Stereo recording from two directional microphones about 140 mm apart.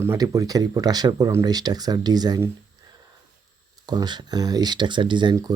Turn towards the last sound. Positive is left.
turn(degrees=-30)  # may be behind; listen again after turning